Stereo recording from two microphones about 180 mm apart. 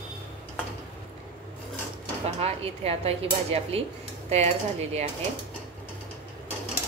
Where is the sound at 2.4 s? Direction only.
35° right (ahead or behind).